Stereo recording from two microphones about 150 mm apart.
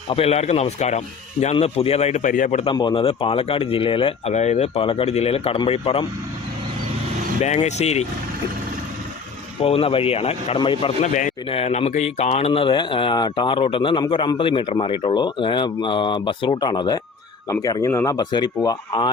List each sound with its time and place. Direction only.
0.1 s speech: 45° left (ahead or behind); by 2.6 s 60° left (ahead or behind)
2.7 s speech: 35° left (ahead or behind)
4.4 s speech: 50° left (ahead or behind)
7.4 s speech: 50° left (ahead or behind)
9.6 s speech: 40° left (ahead or behind)
11.0 s a man's voice: 60° left (ahead or behind)
11.4 s speech: 40° left (ahead or behind); by 19.1 s 25° left (ahead or behind)